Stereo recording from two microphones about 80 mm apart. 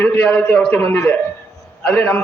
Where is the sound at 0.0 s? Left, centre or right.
Centre.